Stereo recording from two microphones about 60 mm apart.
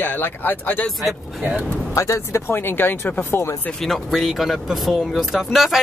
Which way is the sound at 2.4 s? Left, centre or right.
Left.